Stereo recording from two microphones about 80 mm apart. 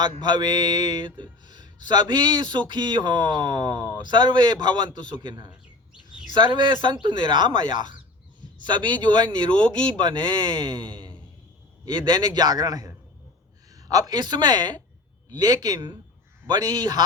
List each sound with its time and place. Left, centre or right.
0.3 s speech: right
5.5 s bird: centre
6.3 s speech: right
8.6 s speech: right
11.9 s speech: right
15.3 s speech: right